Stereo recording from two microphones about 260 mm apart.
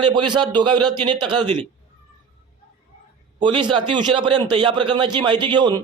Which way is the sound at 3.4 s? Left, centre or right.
Centre.